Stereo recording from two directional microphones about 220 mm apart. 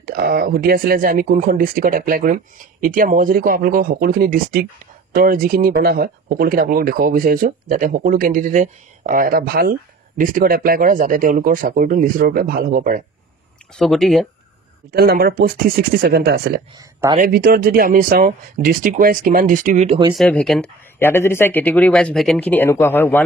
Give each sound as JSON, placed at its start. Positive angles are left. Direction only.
{"t": 0.1, "sound": "speech", "side_deg": -45}
{"t": 13.7, "sound": "speech", "side_deg": 0}
{"t": 14.9, "sound": "speech", "side_deg": -45}
{"t": 16.7, "sound": "speech", "side_deg": -15}
{"t": 17.2, "sound": "speech", "side_deg": -45}
{"t": 20.2, "sound": "speech", "side_deg": 5}